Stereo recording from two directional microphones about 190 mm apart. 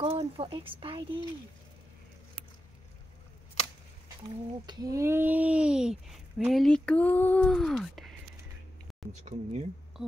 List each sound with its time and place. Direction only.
0.0 s speech: 30° right (ahead or behind)
4.6 s speech: 15° right (ahead or behind); by 8.2 s centre (ahead or behind)
9.2 s speech: 35° right (ahead or behind)
9.9 s a sound: 5° right (ahead or behind)